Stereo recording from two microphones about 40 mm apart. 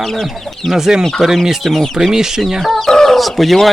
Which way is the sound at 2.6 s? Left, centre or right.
Centre.